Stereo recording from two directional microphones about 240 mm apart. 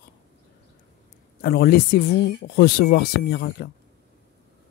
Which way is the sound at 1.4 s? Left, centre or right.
Left.